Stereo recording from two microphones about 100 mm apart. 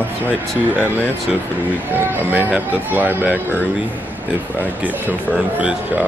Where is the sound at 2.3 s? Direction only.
15° right (ahead or behind).